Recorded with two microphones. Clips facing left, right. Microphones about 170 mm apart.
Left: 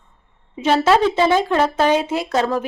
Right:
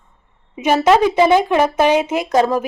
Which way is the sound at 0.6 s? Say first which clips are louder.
Right 2 dB; 15° right (ahead or behind).